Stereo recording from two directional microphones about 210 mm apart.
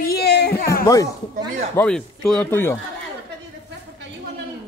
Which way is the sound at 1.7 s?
10° left (ahead or behind).